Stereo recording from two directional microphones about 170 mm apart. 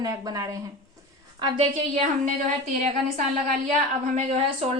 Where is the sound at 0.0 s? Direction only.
20° right (ahead or behind).